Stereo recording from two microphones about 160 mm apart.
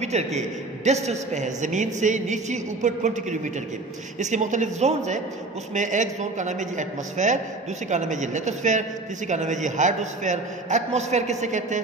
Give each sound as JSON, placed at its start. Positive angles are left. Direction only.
{"t": 0.0, "sound": "a woman's voice", "side_deg": -45}